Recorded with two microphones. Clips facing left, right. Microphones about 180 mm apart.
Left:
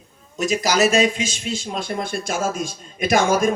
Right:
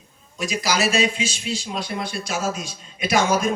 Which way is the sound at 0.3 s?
45° left (ahead or behind).